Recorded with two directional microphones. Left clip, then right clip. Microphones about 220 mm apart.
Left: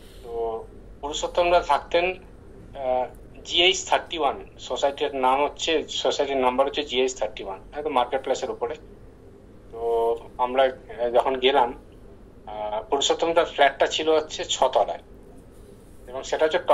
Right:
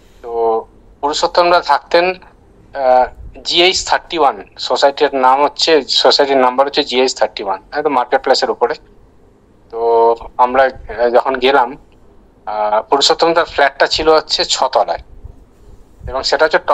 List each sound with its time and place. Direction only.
0.3 s a sound: 50° right (ahead or behind)
1.2 s speech: 50° right (ahead or behind)
2.7 s a sound: 50° right (ahead or behind)
3.9 s speech: 50° right (ahead or behind)
9.8 s a man's voice: 50° right (ahead or behind)
16.1 s speech: 50° right (ahead or behind)